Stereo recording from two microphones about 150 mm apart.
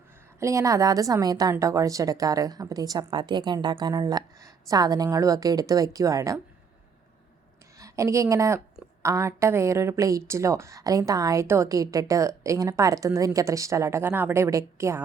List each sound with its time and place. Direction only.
0.3 s a woman's voice: 20° right (ahead or behind)
7.8 s a woman's voice: 20° right (ahead or behind)